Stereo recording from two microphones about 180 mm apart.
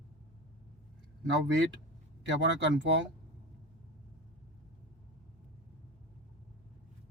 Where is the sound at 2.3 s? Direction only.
90° right.